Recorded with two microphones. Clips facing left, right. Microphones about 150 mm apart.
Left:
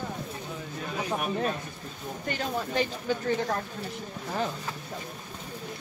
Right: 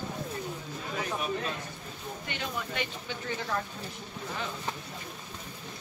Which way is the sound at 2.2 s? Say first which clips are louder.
Left 6 dB; 40° left (ahead or behind).